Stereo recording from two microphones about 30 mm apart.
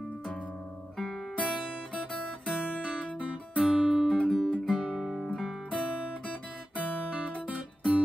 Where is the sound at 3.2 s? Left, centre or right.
Right.